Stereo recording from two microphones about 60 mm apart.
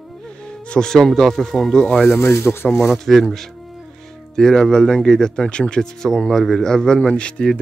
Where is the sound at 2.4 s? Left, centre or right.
Left.